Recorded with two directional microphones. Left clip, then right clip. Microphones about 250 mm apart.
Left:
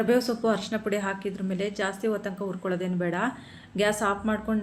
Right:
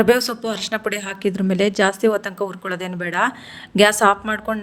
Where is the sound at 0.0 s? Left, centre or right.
Right.